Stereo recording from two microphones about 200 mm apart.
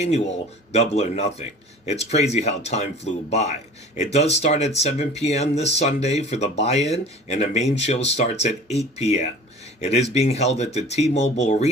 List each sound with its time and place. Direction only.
0.0 s speech: 35° left (ahead or behind)